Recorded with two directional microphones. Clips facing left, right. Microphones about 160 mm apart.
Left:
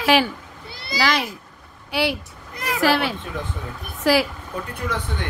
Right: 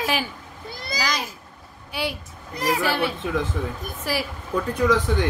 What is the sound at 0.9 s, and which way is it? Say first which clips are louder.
A child's voice: left 6 dB; 70° left (ahead or behind).